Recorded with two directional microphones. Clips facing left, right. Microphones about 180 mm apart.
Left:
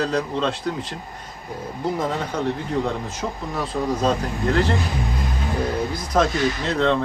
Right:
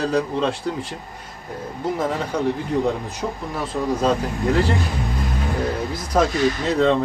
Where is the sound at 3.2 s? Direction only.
10° right (ahead or behind).